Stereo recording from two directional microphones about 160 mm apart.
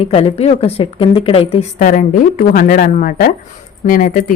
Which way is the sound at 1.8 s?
55° left (ahead or behind).